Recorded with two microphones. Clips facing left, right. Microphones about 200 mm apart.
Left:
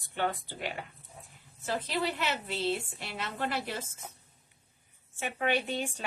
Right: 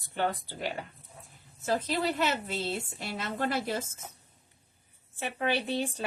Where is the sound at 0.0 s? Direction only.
40° right (ahead or behind).